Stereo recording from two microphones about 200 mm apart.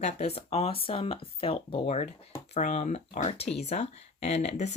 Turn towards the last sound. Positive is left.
turn(degrees=35)  # may be behind; listen again after turning